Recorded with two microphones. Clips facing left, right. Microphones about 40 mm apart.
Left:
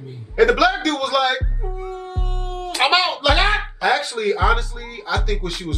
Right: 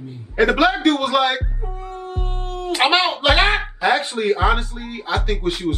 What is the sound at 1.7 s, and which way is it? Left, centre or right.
Music, right.